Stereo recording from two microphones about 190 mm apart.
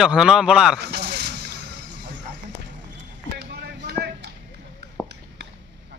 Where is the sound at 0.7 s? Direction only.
60° right (ahead or behind).